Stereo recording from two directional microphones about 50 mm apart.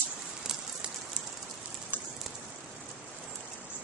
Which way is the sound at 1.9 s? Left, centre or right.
Left.